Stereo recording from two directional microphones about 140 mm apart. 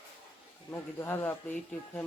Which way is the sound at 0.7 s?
15° left (ahead or behind).